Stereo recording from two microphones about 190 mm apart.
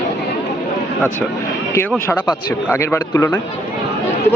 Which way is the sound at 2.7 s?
15° left (ahead or behind).